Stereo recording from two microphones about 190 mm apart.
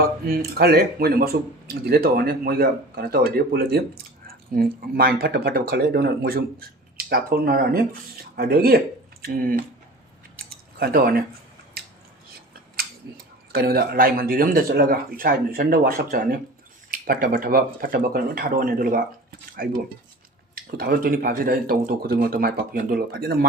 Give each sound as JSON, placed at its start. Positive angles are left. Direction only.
{"t": 0.0, "sound": "speech", "side_deg": -55}
{"t": 10.3, "sound": "a sound", "side_deg": -55}
{"t": 12.8, "sound": "tick-tock", "side_deg": -50}
{"t": 13.5, "sound": "speech", "side_deg": -55}